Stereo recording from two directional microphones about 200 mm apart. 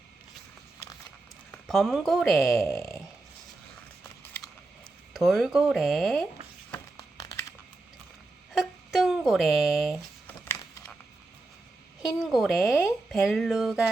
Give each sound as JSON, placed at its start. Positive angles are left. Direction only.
{"t": 1.5, "sound": "speech", "side_deg": 0}
{"t": 2.6, "sound": "dog", "side_deg": 15}
{"t": 5.1, "sound": "speech", "side_deg": 0}
{"t": 7.2, "sound": "crumpling", "side_deg": 15}
{"t": 8.5, "sound": "a sound", "side_deg": 0}
{"t": 10.2, "sound": "typing", "side_deg": 10}
{"t": 12.2, "sound": "speech", "side_deg": 0}